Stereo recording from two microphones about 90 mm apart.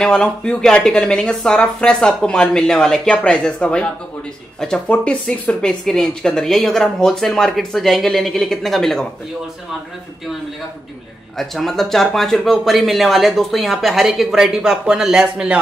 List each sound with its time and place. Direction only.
0.0 s speech: 10° left (ahead or behind)
11.3 s speech: 5° left (ahead or behind); by 15.6 s 10° right (ahead or behind)